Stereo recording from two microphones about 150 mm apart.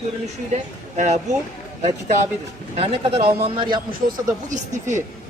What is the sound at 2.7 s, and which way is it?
Speech, 40° right (ahead or behind).